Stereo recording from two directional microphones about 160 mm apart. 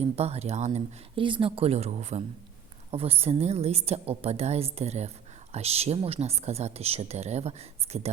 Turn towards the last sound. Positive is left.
turn(degrees=-40)  # may be behind; listen again after turning